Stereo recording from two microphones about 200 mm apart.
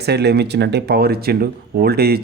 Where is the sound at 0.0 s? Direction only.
55° right (ahead or behind).